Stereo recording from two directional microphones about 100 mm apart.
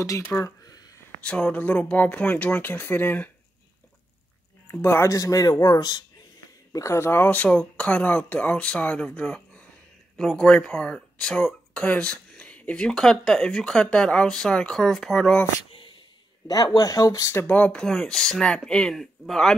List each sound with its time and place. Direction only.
0.3 s speech: 20° left (ahead or behind)
4.6 s speech: 25° left (ahead or behind)
5.1 s a man's voice: 35° left (ahead or behind)
6.7 s speech: 30° left (ahead or behind); by 15.4 s 5° left (ahead or behind)
16.4 s a man's voice: 40° left (ahead or behind)
17.3 s speech: 20° left (ahead or behind); by 19.5 s 5° left (ahead or behind)